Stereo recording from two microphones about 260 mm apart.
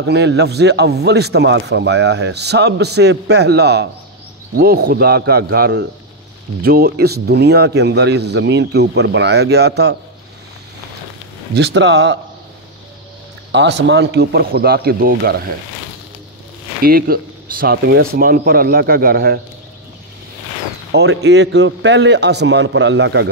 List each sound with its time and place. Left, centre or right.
0.0 s a man's voice: right
11.5 s speech: right
13.5 s a man's voice: right
16.8 s a man's voice: right
20.9 s a man's voice: right